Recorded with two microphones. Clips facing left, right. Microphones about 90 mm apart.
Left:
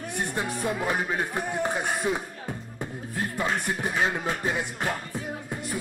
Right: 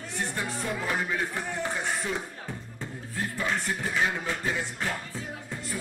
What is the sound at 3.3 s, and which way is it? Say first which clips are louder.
Music: left 2 dB; 20° left (ahead or behind).